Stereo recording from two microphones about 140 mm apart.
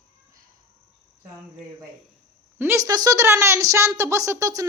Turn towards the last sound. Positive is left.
turn(degrees=-25)  # may be behind; listen again after turning